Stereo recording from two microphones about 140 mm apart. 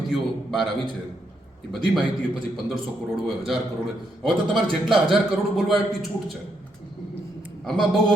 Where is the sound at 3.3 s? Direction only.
Centre (ahead or behind).